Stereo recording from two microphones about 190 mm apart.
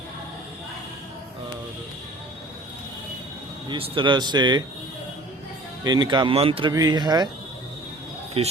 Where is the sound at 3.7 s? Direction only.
25° right (ahead or behind).